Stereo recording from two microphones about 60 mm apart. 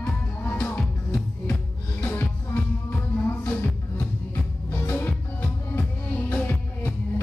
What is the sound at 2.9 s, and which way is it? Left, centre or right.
Music, left.